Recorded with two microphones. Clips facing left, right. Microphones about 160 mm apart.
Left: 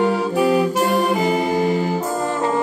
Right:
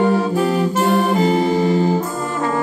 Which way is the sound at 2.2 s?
30° left (ahead or behind).